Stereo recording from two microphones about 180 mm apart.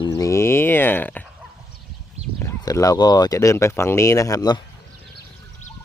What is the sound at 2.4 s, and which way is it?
Speech, 15° left (ahead or behind).